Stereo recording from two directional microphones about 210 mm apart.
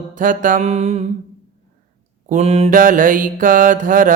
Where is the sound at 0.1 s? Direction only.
40° right (ahead or behind).